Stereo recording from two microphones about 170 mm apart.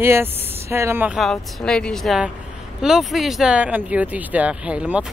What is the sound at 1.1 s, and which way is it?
A woman's voice, 5° left (ahead or behind).